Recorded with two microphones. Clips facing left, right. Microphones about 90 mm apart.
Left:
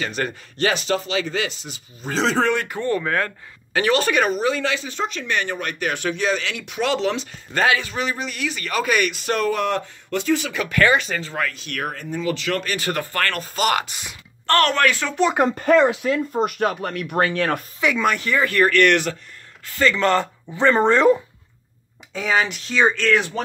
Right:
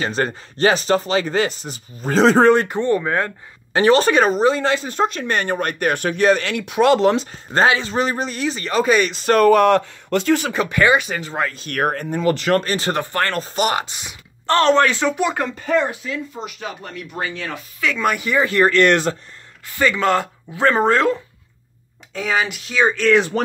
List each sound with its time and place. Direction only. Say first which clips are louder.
0.0 s speech: right 4 dB; 35° right (ahead or behind)
7.6 s speech: right 3 dB; 30° right (ahead or behind)
9.3 s speech: right 10 dB; 60° right (ahead or behind)
10.6 s speech: right 2 dB; 20° right (ahead or behind)
11.5 s speech: right 7 dB; 45° right (ahead or behind); by 15.1 s 25° right (ahead or behind)
15.5 s speech: left 4 dB; 65° left (ahead or behind)
17.9 s speech: right 2 dB; centre (ahead or behind)
18.2 s speech: right 5 dB; 15° right (ahead or behind)
19.7 s speech: right 1 dB; 15° right (ahead or behind)
22.1 s speech: even; centre (ahead or behind)